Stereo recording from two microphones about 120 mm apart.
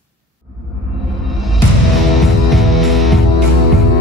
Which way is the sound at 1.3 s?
Centre (ahead or behind).